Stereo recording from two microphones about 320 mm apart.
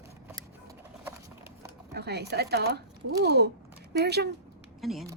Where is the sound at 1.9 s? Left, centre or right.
Right.